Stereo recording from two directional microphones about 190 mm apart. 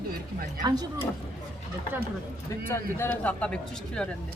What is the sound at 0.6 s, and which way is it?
Speech, 20° right (ahead or behind).